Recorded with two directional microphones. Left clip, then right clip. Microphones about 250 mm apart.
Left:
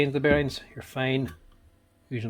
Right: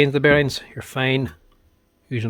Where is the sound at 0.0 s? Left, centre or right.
Right.